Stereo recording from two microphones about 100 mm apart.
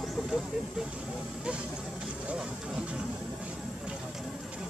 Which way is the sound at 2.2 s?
10° right (ahead or behind).